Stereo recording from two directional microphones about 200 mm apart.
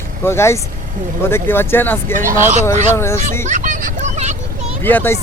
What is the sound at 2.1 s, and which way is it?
Speech, 40° right (ahead or behind).